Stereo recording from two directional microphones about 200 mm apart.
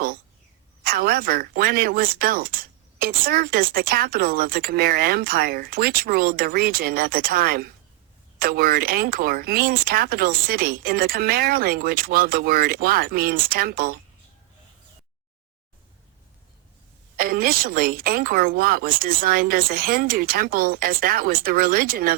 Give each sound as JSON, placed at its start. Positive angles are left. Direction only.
{"t": 0.9, "sound": "speech", "side_deg": -50}
{"t": 17.2, "sound": "speech", "side_deg": -50}